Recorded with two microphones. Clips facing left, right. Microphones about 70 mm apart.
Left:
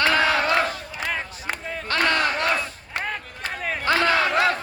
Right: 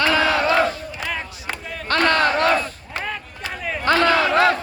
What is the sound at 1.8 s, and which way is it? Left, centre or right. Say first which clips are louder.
Battle cry: right 4 dB; right.